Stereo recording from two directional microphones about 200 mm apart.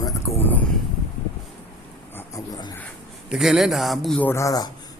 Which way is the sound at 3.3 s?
5° right (ahead or behind).